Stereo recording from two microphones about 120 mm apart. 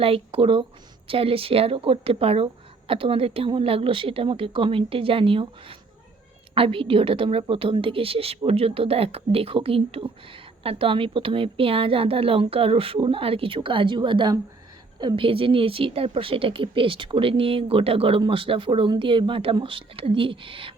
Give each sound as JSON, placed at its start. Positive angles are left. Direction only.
{"t": 0.0, "sound": "speech", "side_deg": -50}